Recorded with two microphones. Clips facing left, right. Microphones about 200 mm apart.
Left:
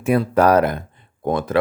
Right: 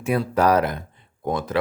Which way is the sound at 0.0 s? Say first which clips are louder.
Left 4 dB; 50° left (ahead or behind).